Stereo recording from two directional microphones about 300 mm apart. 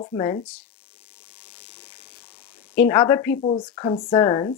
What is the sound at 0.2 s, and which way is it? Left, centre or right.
Speech, centre.